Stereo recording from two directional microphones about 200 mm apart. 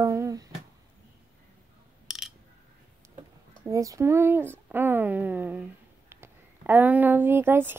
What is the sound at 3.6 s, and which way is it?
Speech, 15° right (ahead or behind).